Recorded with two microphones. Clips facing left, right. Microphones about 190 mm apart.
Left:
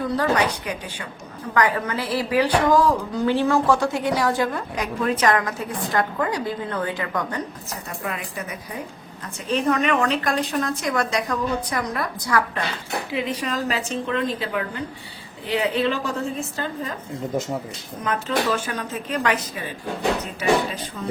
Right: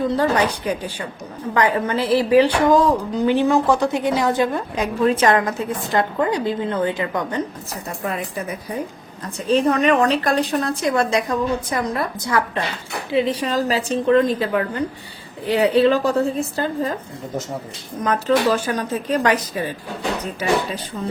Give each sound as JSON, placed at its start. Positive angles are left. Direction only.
{"t": 0.2, "sound": "a woman's voice", "side_deg": -35}
{"t": 9.5, "sound": "a woman's voice", "side_deg": -35}
{"t": 18.0, "sound": "a woman's voice", "side_deg": -40}